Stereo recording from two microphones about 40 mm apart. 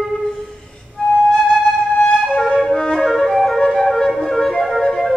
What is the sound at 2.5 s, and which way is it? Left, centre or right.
Flute, centre.